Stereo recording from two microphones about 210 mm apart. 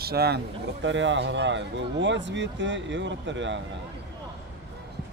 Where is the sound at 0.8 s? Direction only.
60° right (ahead or behind).